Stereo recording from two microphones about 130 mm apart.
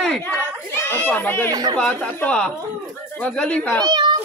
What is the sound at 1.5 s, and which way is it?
Speech, 35° right (ahead or behind).